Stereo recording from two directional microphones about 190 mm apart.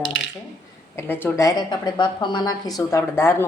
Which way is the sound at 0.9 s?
10° left (ahead or behind).